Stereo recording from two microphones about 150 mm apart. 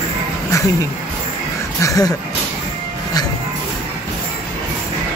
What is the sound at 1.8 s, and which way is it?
Speech, 25° left (ahead or behind).